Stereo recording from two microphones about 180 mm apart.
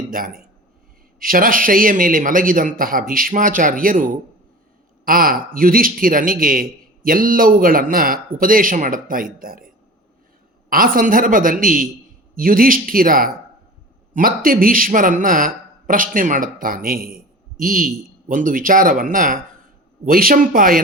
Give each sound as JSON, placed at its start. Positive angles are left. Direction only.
{"t": 0.1, "sound": "a man's voice", "side_deg": -50}